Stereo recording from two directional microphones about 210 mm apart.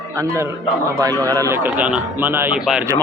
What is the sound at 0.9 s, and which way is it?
Speech, 15° right (ahead or behind).